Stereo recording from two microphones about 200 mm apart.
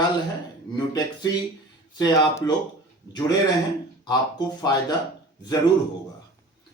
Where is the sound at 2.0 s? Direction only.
20° left (ahead or behind).